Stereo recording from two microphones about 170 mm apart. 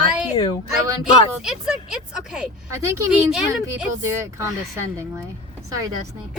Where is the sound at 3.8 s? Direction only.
15° right (ahead or behind).